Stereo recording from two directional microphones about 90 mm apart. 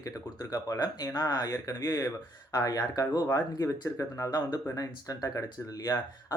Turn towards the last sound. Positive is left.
turn(degrees=40)  # may be behind; listen again after turning